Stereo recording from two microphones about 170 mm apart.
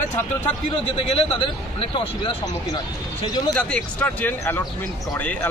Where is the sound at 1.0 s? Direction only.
35° left (ahead or behind).